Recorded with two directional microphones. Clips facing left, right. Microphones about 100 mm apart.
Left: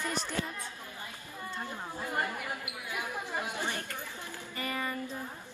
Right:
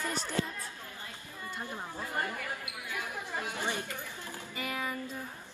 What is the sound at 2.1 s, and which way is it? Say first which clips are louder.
Chatter: left 2 dB; 20° left (ahead or behind).